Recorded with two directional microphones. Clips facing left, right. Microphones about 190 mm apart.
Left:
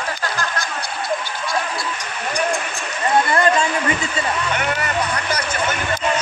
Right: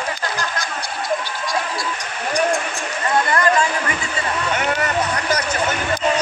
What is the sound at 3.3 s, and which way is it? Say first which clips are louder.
Chatter: left 1 dB; 25° left (ahead or behind).